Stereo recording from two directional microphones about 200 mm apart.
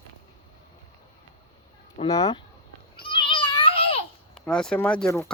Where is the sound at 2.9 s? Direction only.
25° left (ahead or behind).